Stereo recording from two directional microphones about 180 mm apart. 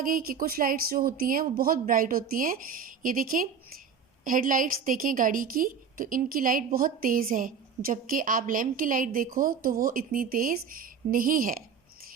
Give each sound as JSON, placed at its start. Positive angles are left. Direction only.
{"t": 0.0, "sound": "a woman's voice", "side_deg": -50}